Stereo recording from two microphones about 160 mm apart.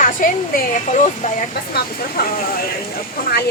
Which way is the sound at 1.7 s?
70° left (ahead or behind).